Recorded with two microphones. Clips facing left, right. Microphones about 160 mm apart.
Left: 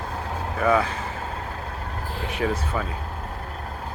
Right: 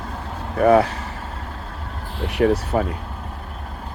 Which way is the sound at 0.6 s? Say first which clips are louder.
Right 7 dB; 55° right (ahead or behind).